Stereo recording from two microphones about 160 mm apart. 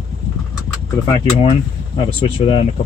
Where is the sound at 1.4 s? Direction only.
35° left (ahead or behind).